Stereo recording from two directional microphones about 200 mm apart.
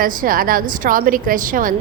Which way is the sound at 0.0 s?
45° right (ahead or behind).